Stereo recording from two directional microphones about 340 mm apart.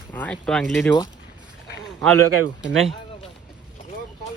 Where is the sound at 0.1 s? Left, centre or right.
Centre.